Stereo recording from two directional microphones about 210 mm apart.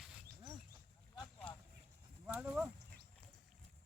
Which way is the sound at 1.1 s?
5° left (ahead or behind).